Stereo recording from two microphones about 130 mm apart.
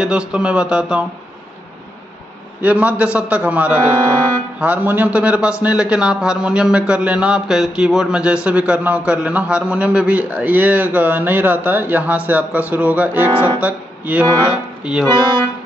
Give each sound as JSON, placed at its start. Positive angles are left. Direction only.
{"t": 0.0, "sound": "a man's voice", "side_deg": -5}
{"t": 2.6, "sound": "a man's voice", "side_deg": -10}
{"t": 13.3, "sound": "speech", "side_deg": 20}
{"t": 13.6, "sound": "speech", "side_deg": -10}
{"t": 14.2, "sound": "speech", "side_deg": 20}
{"t": 14.8, "sound": "music", "side_deg": -10}